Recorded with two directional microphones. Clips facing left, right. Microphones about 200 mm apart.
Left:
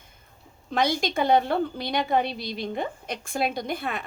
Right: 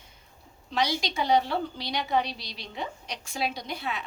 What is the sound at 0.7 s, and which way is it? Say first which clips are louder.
A woman's voice: left 4 dB; 50° left (ahead or behind).